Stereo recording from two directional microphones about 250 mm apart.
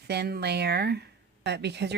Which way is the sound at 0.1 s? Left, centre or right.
Right.